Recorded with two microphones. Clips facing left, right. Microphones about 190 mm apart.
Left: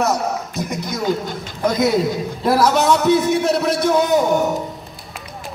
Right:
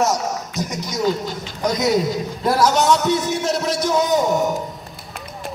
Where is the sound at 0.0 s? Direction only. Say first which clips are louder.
Left 1 dB; 55° left (ahead or behind).